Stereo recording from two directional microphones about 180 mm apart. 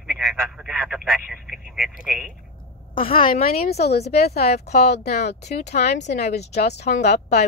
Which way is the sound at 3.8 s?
65° left (ahead or behind).